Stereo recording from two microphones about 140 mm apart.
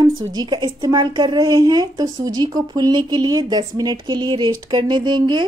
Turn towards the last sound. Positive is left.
turn(degrees=-30)  # may be behind; listen again after turning